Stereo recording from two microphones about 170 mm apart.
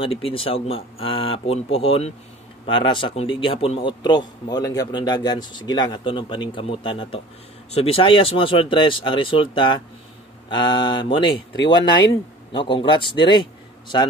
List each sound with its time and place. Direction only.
0.0 s a man's voice: 30° left (ahead or behind)